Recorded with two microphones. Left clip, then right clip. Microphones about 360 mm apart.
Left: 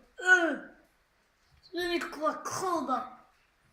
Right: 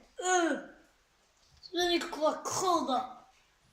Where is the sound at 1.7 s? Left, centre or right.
Centre.